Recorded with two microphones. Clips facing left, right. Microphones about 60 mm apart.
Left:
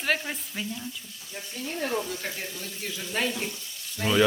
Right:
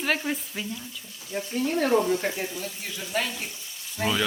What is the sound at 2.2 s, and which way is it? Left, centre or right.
Speech, centre.